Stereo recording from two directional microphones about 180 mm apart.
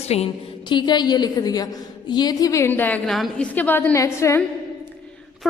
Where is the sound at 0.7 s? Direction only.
25° left (ahead or behind).